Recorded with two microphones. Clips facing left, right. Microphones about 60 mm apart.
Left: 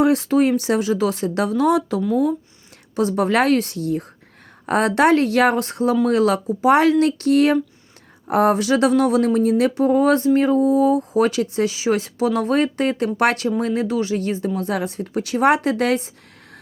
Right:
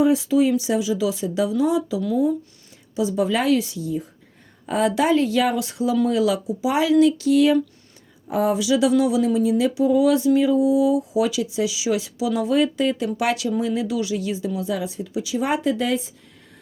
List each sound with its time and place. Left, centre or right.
0.0 s speech: left